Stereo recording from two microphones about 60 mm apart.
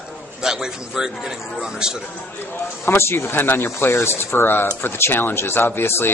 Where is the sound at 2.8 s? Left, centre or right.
Left.